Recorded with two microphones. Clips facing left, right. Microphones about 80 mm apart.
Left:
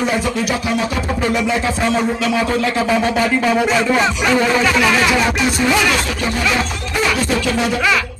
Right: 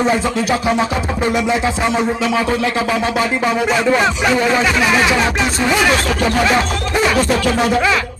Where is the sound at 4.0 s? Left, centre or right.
Right.